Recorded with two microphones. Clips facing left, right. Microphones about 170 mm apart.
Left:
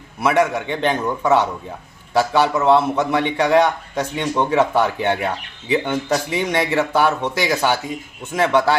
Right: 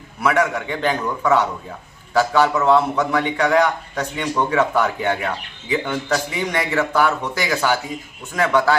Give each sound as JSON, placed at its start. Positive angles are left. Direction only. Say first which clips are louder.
{"t": 0.2, "sound": "a man's voice", "louder": "left 2 dB", "side_deg": 20}